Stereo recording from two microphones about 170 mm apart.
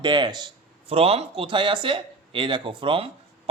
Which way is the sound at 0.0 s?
25° right (ahead or behind).